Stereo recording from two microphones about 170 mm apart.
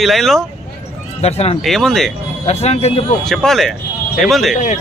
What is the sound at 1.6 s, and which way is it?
Speech, centre (ahead or behind).